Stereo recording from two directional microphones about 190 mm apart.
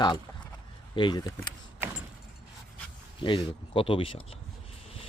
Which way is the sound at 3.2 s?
25° left (ahead or behind).